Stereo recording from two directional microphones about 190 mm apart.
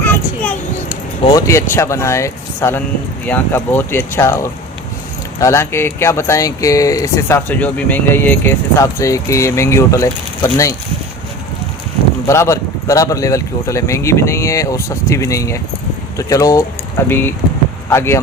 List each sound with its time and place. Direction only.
1.2 s speech: 20° left (ahead or behind)
12.3 s speech: 15° left (ahead or behind)